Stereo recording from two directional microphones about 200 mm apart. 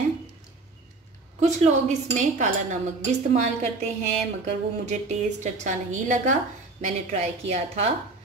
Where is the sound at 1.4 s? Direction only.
35° right (ahead or behind).